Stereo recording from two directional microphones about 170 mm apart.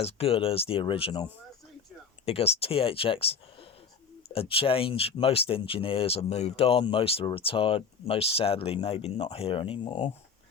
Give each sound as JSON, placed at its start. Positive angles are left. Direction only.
{"t": 0.0, "sound": "speech", "side_deg": 35}
{"t": 4.3, "sound": "speech", "side_deg": 35}